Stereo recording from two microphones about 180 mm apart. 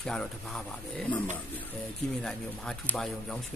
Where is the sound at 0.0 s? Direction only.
5° left (ahead or behind).